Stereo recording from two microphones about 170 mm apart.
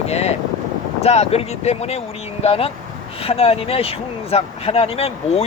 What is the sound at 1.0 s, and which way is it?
Speech, 35° left (ahead or behind).